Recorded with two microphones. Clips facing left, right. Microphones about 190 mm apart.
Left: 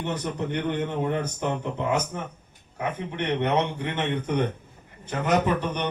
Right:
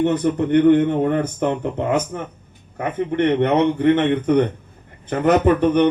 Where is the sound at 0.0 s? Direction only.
55° right (ahead or behind).